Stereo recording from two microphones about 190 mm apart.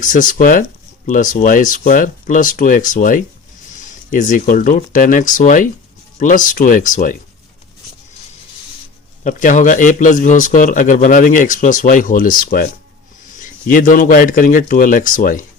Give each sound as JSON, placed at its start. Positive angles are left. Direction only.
{"t": 0.0, "sound": "a man's voice", "side_deg": 45}
{"t": 9.2, "sound": "a man's voice", "side_deg": 45}